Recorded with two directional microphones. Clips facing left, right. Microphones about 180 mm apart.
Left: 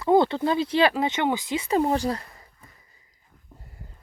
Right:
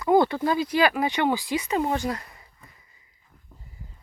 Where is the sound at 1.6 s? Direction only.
35° left (ahead or behind).